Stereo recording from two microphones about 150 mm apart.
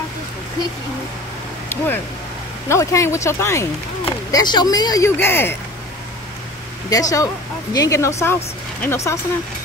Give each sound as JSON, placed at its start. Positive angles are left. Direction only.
{"t": 1.7, "sound": "speech", "side_deg": 15}
{"t": 4.3, "sound": "speech", "side_deg": 30}
{"t": 6.9, "sound": "speech", "side_deg": 25}